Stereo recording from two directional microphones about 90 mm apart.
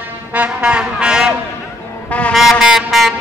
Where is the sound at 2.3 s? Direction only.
Centre (ahead or behind).